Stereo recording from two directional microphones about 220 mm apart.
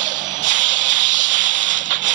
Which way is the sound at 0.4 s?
35° right (ahead or behind).